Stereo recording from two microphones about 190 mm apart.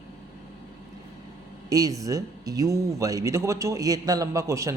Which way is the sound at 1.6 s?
20° right (ahead or behind).